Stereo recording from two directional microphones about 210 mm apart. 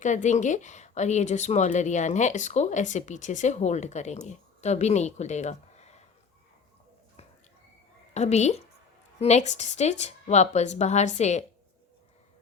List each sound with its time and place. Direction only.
0.0 s a woman's voice: 35° left (ahead or behind)
8.1 s a woman's voice: 30° left (ahead or behind)